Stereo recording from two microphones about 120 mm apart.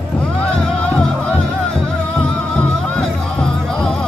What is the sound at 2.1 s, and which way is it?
Music, 5° left (ahead or behind).